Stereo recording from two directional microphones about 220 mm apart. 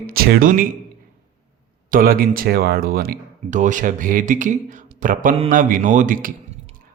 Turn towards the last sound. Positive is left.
turn(degrees=-40)  # may be behind; listen again after turning